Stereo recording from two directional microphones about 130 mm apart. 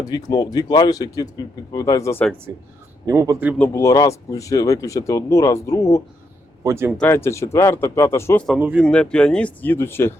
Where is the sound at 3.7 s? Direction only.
25° left (ahead or behind).